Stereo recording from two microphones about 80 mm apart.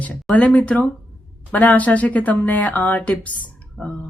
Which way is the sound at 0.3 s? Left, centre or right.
Centre.